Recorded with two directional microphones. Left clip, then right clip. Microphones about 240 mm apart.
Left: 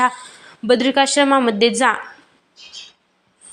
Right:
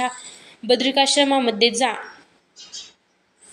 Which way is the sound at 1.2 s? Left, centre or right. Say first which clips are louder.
Left 3 dB; left.